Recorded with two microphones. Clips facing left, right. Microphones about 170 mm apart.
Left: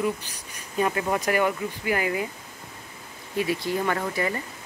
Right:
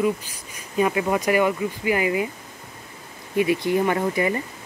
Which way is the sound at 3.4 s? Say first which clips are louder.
Right 6 dB; 10° right (ahead or behind).